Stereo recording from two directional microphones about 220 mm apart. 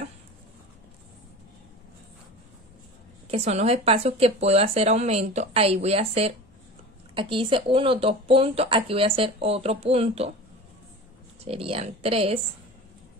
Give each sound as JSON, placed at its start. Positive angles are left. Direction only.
{"t": 3.3, "sound": "speech", "side_deg": -30}
{"t": 11.4, "sound": "speech", "side_deg": -25}